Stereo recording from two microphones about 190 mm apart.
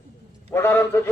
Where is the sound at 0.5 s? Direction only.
10° left (ahead or behind).